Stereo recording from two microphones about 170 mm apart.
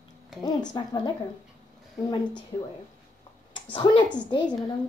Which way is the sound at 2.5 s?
25° left (ahead or behind).